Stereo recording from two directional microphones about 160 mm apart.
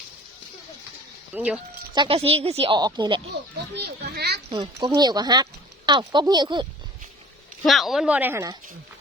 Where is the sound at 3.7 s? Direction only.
90° right.